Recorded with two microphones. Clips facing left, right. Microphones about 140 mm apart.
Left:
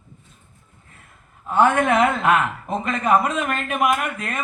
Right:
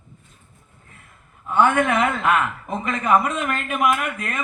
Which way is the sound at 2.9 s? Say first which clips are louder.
Even; 55° left (ahead or behind).